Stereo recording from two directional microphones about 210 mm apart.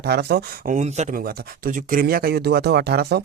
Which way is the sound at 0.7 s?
35° right (ahead or behind).